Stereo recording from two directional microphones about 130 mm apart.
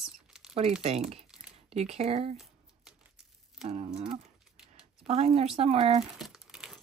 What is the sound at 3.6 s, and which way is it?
Speech, 50° right (ahead or behind).